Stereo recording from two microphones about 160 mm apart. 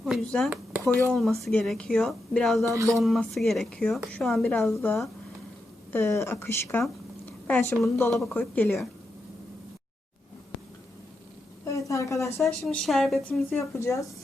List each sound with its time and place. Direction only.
0.0 s a sound: centre (ahead or behind)
1.1 s a woman's voice: centre (ahead or behind)
4.7 s a woman's voice: 15° left (ahead or behind)
8.1 s a woman's voice: 5° left (ahead or behind)
11.6 s a woman's voice: 20° left (ahead or behind)
12.4 s a woman's voice: 5° left (ahead or behind)
13.5 s speech: 15° left (ahead or behind)